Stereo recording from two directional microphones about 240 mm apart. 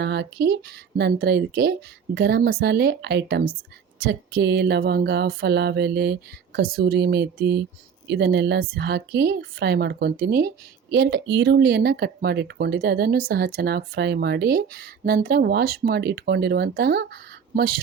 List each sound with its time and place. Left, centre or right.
0.0 s speech: right